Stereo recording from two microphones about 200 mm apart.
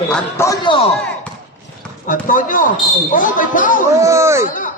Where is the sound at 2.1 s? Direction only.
40° left (ahead or behind).